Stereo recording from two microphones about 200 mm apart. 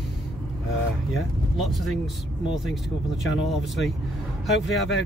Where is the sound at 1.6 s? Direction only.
Centre (ahead or behind).